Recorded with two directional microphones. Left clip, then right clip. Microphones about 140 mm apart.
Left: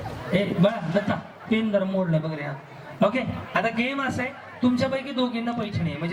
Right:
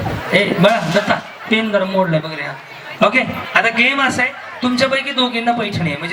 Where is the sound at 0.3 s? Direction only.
20° right (ahead or behind).